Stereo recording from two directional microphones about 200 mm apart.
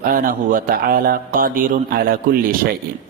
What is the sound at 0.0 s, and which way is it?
A man's voice, 45° right (ahead or behind).